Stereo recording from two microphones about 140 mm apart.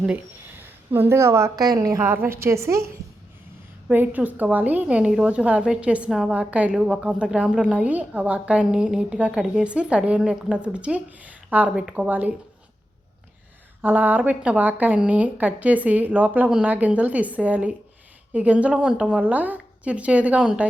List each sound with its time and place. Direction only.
0.0 s a woman's voice: 10° right (ahead or behind)
3.8 s a woman's voice: 10° right (ahead or behind)
13.8 s a woman's voice: 15° right (ahead or behind)